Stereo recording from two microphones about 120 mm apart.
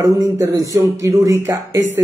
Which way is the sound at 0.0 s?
30° right (ahead or behind).